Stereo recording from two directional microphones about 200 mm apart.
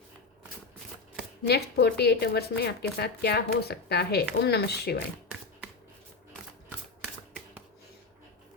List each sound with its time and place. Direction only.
1.5 s speech: 55° left (ahead or behind)